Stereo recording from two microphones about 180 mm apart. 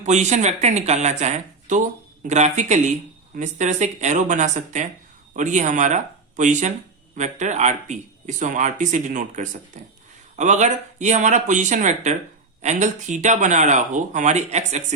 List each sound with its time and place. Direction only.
0.0 s speech: 40° right (ahead or behind)